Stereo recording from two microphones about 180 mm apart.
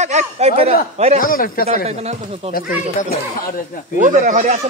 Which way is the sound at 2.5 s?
55° left (ahead or behind).